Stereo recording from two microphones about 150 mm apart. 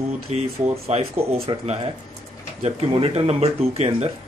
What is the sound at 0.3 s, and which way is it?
Speech, 45° right (ahead or behind).